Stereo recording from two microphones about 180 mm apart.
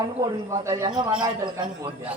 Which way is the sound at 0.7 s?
20° right (ahead or behind).